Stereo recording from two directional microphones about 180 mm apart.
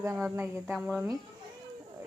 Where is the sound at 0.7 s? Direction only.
5° right (ahead or behind).